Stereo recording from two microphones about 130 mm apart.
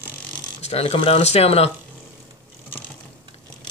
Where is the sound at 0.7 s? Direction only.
50° left (ahead or behind).